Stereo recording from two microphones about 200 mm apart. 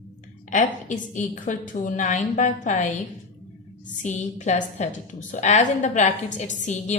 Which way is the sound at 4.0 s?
35° left (ahead or behind).